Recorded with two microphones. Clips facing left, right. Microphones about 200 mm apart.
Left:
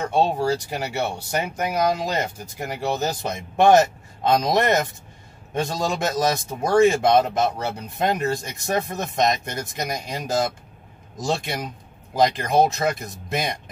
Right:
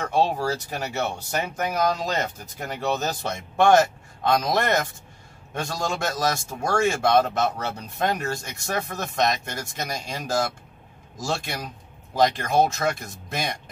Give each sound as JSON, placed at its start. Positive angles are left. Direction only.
{"t": 0.0, "sound": "speech", "side_deg": 25}
{"t": 0.5, "sound": "speech", "side_deg": 15}